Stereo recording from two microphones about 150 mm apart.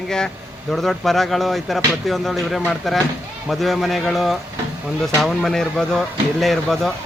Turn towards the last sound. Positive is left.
turn(degrees=0)  # may be behind; listen again after turning